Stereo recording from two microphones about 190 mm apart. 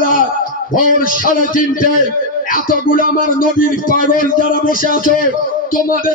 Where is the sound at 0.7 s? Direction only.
45° left (ahead or behind).